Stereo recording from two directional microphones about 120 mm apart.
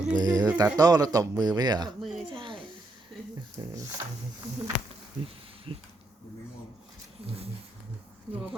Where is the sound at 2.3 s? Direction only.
45° right (ahead or behind).